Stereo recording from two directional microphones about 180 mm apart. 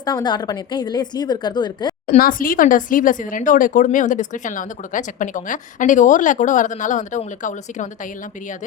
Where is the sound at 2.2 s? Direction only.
50° left (ahead or behind).